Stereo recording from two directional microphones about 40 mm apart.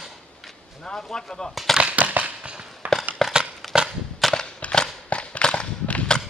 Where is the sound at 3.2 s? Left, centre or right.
Centre.